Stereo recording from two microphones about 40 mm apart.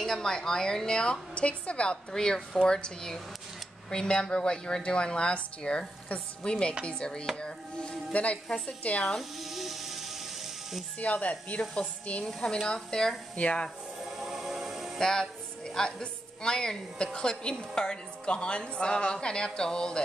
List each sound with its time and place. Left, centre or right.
0.0 s a woman's voice: centre
8.1 s speech: left
9.4 s music: centre
11.0 s a woman's voice: left; by 13.1 s centre
13.4 s a woman's voice: left
14.0 s music: centre
15.0 s a woman's voice: centre